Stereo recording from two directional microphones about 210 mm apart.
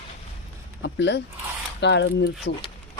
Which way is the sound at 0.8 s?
55° left (ahead or behind).